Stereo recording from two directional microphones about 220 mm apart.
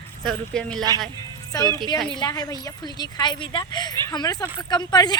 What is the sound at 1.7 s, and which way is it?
Speech, 20° right (ahead or behind).